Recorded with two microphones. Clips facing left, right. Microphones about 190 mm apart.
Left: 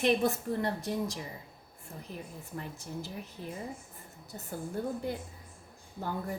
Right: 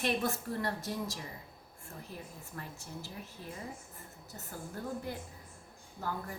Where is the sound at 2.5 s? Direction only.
15° left (ahead or behind).